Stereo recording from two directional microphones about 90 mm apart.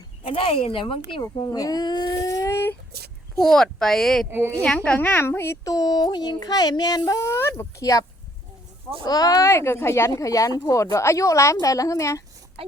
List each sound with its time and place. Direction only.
0.3 s speech: 80° left
1.5 s speech: 40° left (ahead or behind)
2.3 s a sound: 35° left (ahead or behind)
3.4 s speech: 5° left (ahead or behind)
4.3 s speech: 25° right (ahead or behind)
4.6 s a woman's voice: 10° left (ahead or behind)
4.9 s a woman's voice: 20° left (ahead or behind)
5.6 s speech: 45° left (ahead or behind)
7.2 s speech: 30° left (ahead or behind)
9.0 s speech: 45° left (ahead or behind)
9.5 s speech: 30° left (ahead or behind)